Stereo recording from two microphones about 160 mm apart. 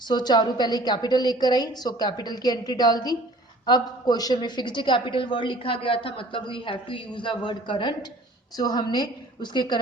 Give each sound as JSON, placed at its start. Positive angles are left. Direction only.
{"t": 0.0, "sound": "a woman's voice", "side_deg": 25}